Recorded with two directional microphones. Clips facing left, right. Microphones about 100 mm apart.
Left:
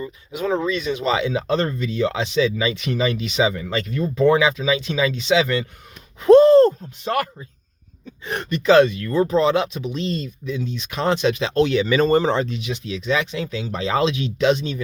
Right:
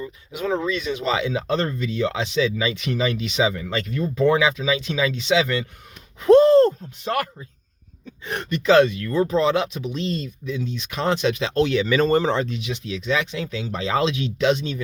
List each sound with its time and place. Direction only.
0.0 s speech: 30° left (ahead or behind)
12.5 s speech: 40° left (ahead or behind)
12.9 s speech: 25° left (ahead or behind)